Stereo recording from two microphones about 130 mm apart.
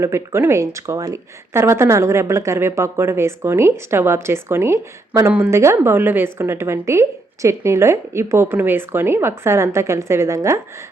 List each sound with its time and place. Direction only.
0.0 s speech: 20° right (ahead or behind)